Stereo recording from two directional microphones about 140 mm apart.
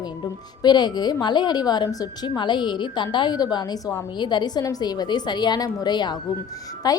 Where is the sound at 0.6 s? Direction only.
30° left (ahead or behind).